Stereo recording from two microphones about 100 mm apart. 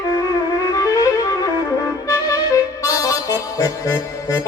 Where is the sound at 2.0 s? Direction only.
35° left (ahead or behind).